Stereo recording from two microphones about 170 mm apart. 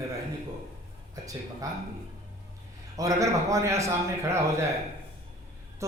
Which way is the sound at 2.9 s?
20° right (ahead or behind).